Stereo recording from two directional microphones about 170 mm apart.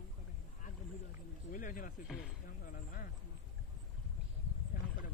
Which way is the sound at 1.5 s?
50° left (ahead or behind).